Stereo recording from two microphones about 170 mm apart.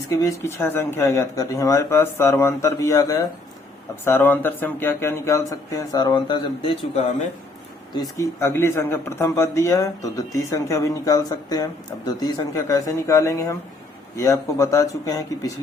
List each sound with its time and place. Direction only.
0.2 s speech: 15° left (ahead or behind); by 7.1 s 30° left (ahead or behind)
7.9 s speech: 15° left (ahead or behind)